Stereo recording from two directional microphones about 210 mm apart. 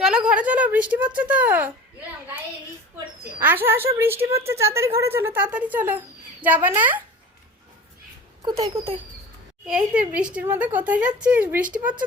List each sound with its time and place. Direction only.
0.3 s a sound: 5° right (ahead or behind)
3.4 s a woman's voice: 10° right (ahead or behind)
8.4 s speech: 25° right (ahead or behind)
9.6 s a woman's voice: 5° right (ahead or behind)